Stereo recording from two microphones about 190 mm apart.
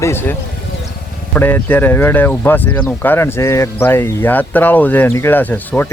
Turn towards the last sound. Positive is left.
turn(degrees=10)  # may be behind; listen again after turning